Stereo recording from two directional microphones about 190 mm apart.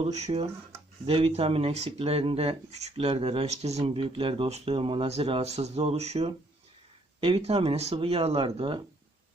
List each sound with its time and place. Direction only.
0.0 s speech: 35° right (ahead or behind)